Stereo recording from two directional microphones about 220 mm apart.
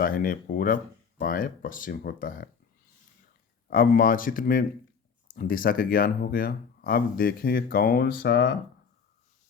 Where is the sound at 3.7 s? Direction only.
40° left (ahead or behind).